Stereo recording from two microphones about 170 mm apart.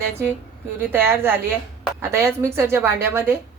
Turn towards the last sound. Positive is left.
turn(degrees=-15)  # may be behind; listen again after turning